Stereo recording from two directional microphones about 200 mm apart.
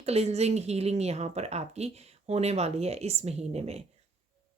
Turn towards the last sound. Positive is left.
turn(degrees=-30)  # may be behind; listen again after turning